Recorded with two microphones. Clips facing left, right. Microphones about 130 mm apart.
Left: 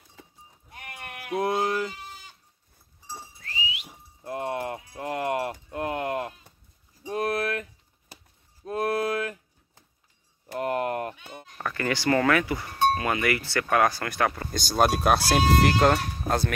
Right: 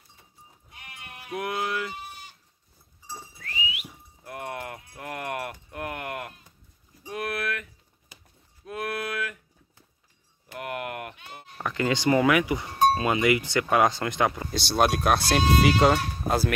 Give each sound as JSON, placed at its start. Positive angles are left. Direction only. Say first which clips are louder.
{"t": 0.2, "sound": "livestock", "louder": "left 14 dB", "side_deg": 90}
{"t": 0.7, "sound": "sheep", "louder": "left 5 dB", "side_deg": 50}
{"t": 1.3, "sound": "music", "louder": "left 4 dB", "side_deg": 35}
{"t": 3.4, "sound": "whistling", "louder": "right 1 dB", "side_deg": 30}
{"t": 7.1, "sound": "a sound", "louder": "left 4 dB", "side_deg": 35}
{"t": 10.5, "sound": "a sound", "louder": "left 6 dB", "side_deg": 35}
{"t": 11.5, "sound": "speech", "louder": "right 2 dB", "side_deg": -15}
{"t": 12.7, "sound": "cowbell", "louder": "right 2 dB", "side_deg": -35}
{"t": 13.0, "sound": "speech", "louder": "right 3 dB", "side_deg": -20}
{"t": 14.5, "sound": "speech", "louder": "even", "side_deg": 0}